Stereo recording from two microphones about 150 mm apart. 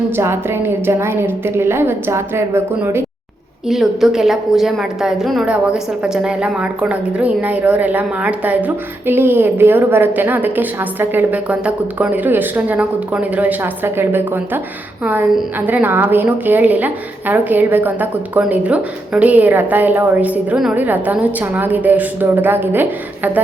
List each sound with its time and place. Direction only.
0.2 s a woman's voice: 15° right (ahead or behind)
3.7 s a woman's voice: centre (ahead or behind)